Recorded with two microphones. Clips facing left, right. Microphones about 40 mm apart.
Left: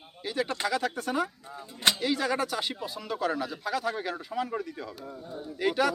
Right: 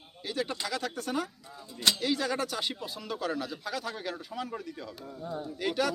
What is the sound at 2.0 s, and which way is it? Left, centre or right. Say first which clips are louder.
Speech: left 2 dB; centre.